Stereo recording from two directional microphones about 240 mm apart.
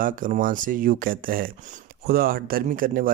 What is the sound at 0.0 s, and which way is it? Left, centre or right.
Speech, right.